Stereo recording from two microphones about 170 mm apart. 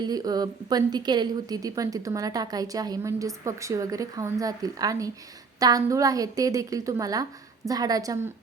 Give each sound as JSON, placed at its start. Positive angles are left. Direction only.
{"t": 0.0, "sound": "a woman's voice", "side_deg": -25}